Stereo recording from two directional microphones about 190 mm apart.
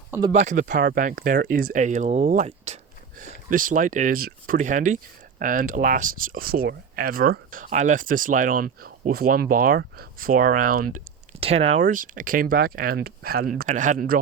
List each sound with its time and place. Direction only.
0.3 s speech: 40° right (ahead or behind)
11.3 s speech: 35° right (ahead or behind)